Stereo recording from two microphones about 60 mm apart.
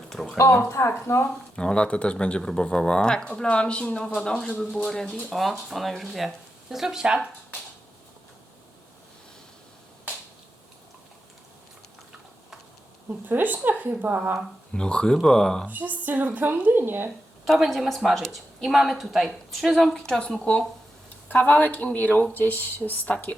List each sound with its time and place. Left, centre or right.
0.1 s a sound: centre
1.0 s speech: left
1.5 s a woman's voice: centre
13.1 s a woman's voice: right
14.7 s speech: centre
15.6 s a woman's voice: right
17.4 s a woman's voice: centre
21.4 s speech: left